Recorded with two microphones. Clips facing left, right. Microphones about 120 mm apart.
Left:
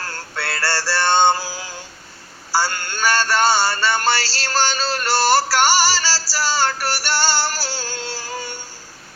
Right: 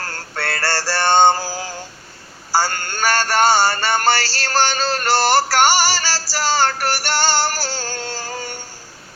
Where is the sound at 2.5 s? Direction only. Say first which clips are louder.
Right 2 dB; 45° right (ahead or behind).